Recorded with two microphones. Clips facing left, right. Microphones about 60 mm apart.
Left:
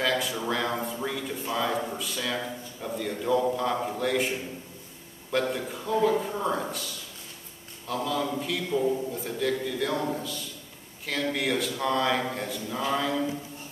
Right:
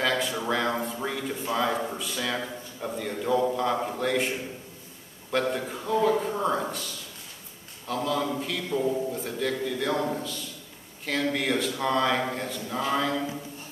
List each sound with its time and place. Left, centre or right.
0.0 s a sound: centre
1.0 s a man's voice: centre
5.3 s a man's voice: centre
7.8 s a man's voice: centre
11.1 s a man's voice: centre